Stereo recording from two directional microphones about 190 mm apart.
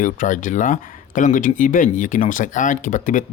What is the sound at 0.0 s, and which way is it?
Speech, 40° left (ahead or behind).